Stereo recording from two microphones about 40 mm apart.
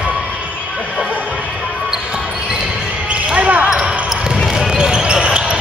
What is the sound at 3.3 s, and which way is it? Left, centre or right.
Basketball bounce, right.